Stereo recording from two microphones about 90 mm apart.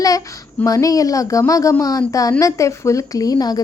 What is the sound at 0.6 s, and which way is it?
Speech, 40° left (ahead or behind).